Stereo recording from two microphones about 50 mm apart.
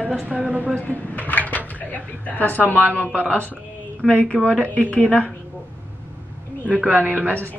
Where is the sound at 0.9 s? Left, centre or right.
Left.